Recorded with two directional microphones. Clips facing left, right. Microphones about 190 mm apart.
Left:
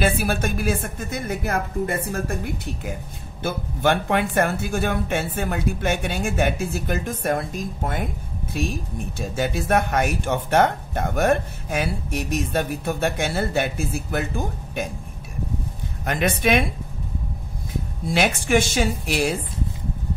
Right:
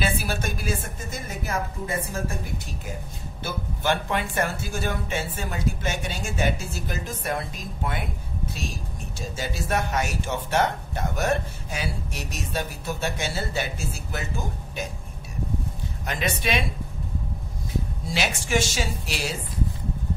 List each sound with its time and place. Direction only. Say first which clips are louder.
0.0 s speech: left 5 dB; 55° left (ahead or behind)
9.2 s speech: left 6 dB; 60° left (ahead or behind)
16.1 s speech: left 7 dB; 55° left (ahead or behind)
18.0 s speech: left 9 dB; 55° left (ahead or behind)